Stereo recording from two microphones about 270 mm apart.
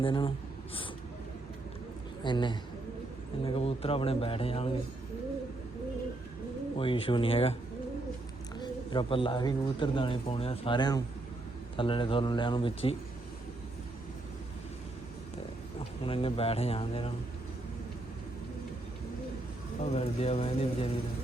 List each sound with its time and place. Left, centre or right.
0.0 s speech: centre
2.2 s speech: centre
6.7 s speech: centre
8.5 s speech: centre
16.0 s speech: centre
19.8 s speech: left